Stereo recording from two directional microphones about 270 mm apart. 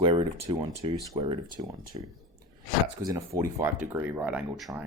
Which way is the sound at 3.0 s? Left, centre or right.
Centre.